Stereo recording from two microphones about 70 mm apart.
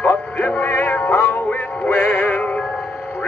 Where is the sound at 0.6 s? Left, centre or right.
Left.